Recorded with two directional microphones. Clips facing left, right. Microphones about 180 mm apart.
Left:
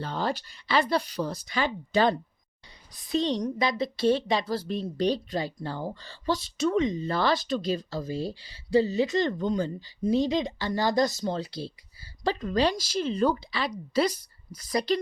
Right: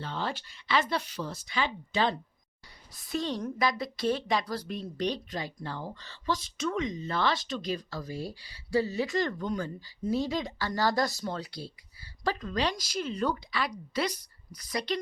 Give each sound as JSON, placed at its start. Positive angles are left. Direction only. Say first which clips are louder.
{"t": 0.0, "sound": "speech", "louder": "left 5 dB", "side_deg": 40}
{"t": 3.1, "sound": "a woman's voice", "louder": "left 5 dB", "side_deg": 20}